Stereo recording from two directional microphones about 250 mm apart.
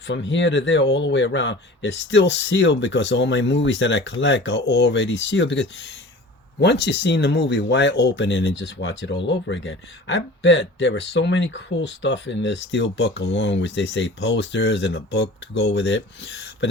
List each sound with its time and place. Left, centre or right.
0.1 s speech: left